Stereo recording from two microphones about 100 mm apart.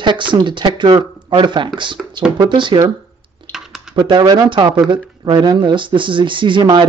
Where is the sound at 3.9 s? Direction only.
45° right (ahead or behind).